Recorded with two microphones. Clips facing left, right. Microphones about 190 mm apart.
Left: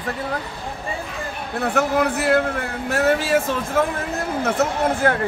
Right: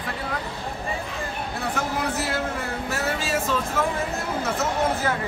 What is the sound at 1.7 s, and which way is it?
Speech, 65° left (ahead or behind).